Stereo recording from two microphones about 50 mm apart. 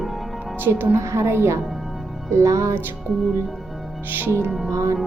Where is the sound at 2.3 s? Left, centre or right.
Right.